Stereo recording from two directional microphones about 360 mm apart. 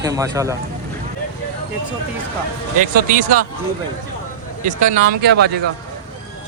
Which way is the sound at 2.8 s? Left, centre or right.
Right.